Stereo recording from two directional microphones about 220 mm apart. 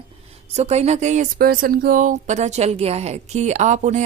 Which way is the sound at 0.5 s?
30° right (ahead or behind).